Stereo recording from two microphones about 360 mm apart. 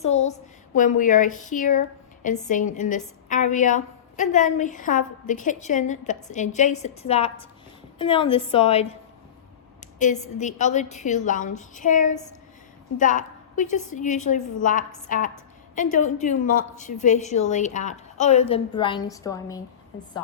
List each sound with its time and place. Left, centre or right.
0.0 s a sound: centre
0.8 s a woman's voice: left
10.0 s a woman's voice: centre